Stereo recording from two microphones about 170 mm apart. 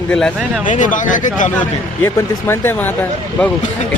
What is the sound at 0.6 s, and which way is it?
Speech, 50° left (ahead or behind).